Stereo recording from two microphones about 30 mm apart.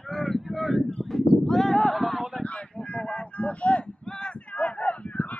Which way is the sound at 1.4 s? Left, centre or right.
Centre.